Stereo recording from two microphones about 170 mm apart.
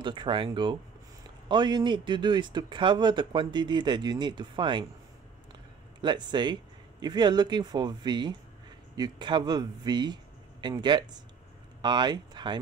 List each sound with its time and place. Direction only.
0.0 s speech: 30° right (ahead or behind)
5.9 s speech: 25° right (ahead or behind)